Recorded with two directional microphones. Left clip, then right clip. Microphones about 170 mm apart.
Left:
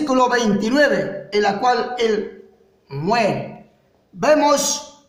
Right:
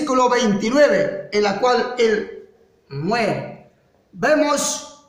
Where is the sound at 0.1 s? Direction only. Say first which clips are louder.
Even; 60° left (ahead or behind).